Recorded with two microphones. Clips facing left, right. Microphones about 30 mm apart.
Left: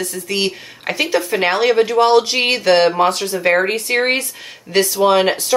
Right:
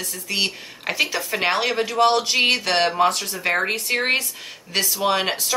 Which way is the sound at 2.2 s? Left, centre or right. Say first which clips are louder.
Left 3 dB; left.